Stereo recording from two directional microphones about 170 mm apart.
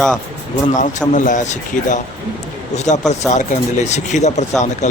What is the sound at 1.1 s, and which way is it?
Speech, 50° left (ahead or behind).